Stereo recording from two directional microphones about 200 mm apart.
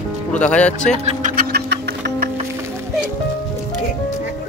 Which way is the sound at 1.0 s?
40° right (ahead or behind).